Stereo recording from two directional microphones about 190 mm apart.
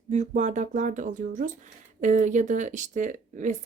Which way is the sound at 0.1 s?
40° right (ahead or behind).